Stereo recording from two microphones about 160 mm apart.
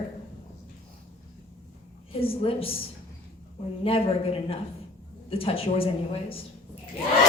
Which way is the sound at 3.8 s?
35° left (ahead or behind).